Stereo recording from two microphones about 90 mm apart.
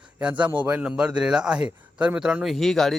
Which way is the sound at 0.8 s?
10° right (ahead or behind).